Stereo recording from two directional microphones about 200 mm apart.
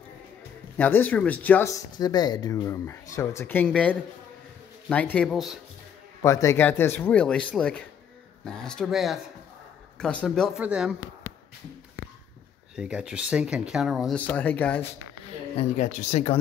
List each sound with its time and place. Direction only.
0.7 s speech: 10° left (ahead or behind)
6.2 s speech: 15° left (ahead or behind); by 11.0 s 5° right (ahead or behind)
12.7 s speech: 5° right (ahead or behind)
15.5 s speech: 35° left (ahead or behind)